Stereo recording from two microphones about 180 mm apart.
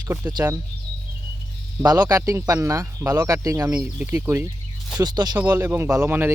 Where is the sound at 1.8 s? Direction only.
20° right (ahead or behind).